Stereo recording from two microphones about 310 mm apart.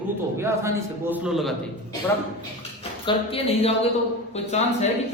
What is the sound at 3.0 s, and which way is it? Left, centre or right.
A man's voice, centre.